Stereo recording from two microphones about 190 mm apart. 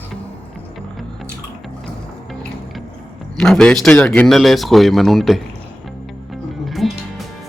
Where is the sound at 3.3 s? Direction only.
Centre (ahead or behind).